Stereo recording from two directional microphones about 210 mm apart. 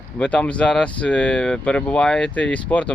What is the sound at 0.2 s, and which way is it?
Speech, 5° left (ahead or behind).